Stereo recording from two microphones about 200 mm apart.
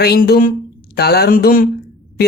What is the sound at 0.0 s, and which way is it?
A woman's voice, 50° left (ahead or behind).